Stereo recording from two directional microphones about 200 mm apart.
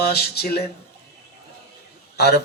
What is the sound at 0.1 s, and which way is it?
Speech, 50° left (ahead or behind).